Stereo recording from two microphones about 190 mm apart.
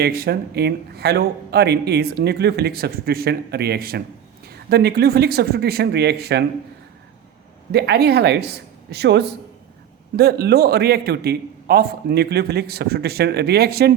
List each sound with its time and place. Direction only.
0.0 s speech: 55° right (ahead or behind)
7.7 s speech: 60° right (ahead or behind)